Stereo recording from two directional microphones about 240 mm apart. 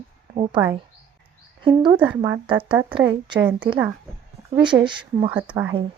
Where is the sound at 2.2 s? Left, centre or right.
Centre.